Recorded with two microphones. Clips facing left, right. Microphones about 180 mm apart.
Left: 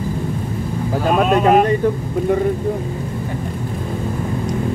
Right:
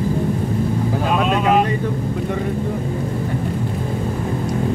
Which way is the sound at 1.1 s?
45° left (ahead or behind).